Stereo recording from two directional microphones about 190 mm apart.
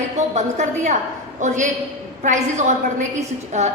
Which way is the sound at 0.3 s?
40° right (ahead or behind).